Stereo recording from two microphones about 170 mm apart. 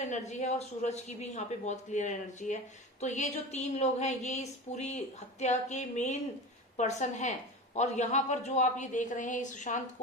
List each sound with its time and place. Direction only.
0.0 s speech: 45° left (ahead or behind)